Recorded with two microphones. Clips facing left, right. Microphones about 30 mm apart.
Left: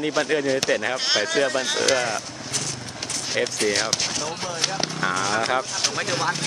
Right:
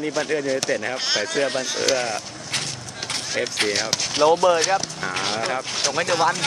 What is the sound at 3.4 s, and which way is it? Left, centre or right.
Speech, centre.